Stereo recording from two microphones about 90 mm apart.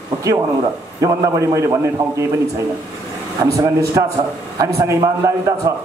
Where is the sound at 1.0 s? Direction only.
35° right (ahead or behind).